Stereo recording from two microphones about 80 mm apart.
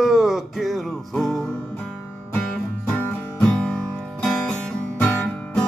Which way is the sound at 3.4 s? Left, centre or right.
Centre.